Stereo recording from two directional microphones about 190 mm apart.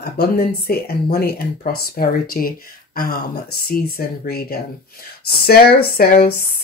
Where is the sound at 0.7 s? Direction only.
50° left (ahead or behind).